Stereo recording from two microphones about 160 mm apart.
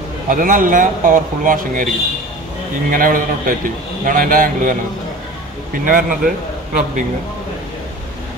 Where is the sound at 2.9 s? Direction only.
60° right (ahead or behind).